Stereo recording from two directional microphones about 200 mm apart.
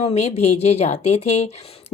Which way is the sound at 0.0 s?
30° left (ahead or behind).